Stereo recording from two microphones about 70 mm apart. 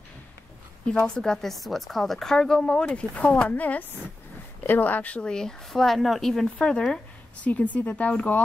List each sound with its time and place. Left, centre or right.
0.8 s speech: centre
6.4 s speech: centre